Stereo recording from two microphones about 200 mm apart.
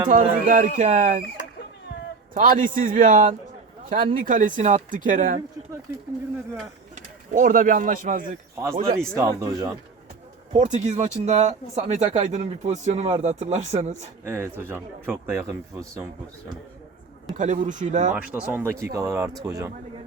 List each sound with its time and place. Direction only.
0.1 s speech: 40° right (ahead or behind)
2.3 s speech: 40° right (ahead or behind)
6.9 s speech: 40° right (ahead or behind)
8.9 s speech: 15° right (ahead or behind)
10.5 s speech: 35° right (ahead or behind)
14.3 s speech: 10° right (ahead or behind)
17.3 s speech: 40° right (ahead or behind)
18.1 s speech: 5° right (ahead or behind)